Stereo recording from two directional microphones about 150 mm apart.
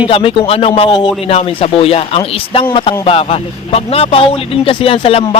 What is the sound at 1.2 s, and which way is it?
Speech, 40° left (ahead or behind).